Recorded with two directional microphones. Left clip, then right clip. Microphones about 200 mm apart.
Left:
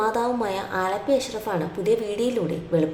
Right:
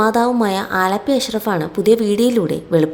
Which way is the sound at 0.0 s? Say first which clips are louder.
Right 8 dB; 40° right (ahead or behind).